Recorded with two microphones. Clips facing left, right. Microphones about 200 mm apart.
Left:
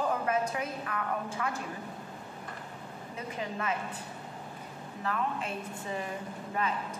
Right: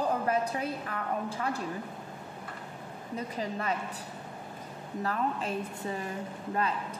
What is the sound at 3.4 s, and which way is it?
Speech, 35° right (ahead or behind).